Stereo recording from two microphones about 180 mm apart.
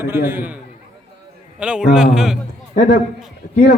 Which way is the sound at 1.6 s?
5° right (ahead or behind).